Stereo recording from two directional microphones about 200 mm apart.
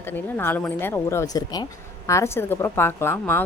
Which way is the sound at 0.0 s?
10° left (ahead or behind).